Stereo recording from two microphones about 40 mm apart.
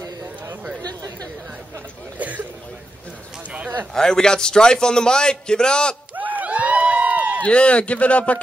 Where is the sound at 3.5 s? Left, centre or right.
Right.